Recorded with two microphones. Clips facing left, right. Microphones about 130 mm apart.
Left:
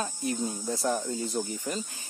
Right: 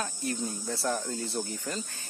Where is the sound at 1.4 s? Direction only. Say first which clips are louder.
Left 2 dB; centre (ahead or behind).